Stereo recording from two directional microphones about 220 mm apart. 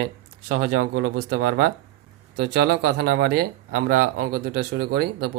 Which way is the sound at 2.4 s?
50° right (ahead or behind).